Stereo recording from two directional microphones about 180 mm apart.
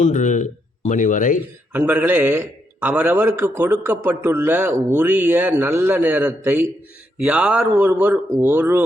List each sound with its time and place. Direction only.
0.0 s a man's voice: 45° left (ahead or behind)
1.7 s a man's voice: 10° right (ahead or behind)